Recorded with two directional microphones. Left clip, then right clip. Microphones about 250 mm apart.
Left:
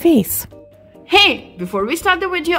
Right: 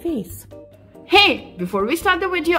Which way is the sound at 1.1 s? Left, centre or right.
Centre.